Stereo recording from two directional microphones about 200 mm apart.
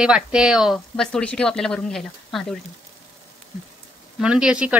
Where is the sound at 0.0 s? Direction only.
5° right (ahead or behind).